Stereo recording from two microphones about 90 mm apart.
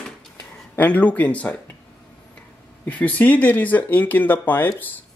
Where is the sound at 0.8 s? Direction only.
20° left (ahead or behind).